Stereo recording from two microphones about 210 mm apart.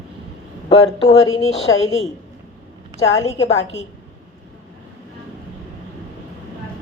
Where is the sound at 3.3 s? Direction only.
30° left (ahead or behind).